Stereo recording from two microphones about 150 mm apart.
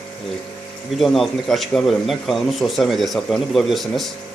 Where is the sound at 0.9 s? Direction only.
Centre (ahead or behind).